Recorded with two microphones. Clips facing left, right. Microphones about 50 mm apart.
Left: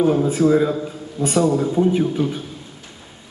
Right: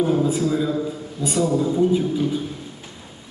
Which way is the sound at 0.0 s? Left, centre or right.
Left.